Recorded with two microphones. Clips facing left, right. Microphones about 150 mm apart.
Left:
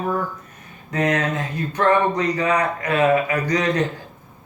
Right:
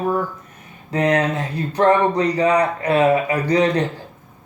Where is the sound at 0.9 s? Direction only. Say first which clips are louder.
Right 3 dB; 30° right (ahead or behind).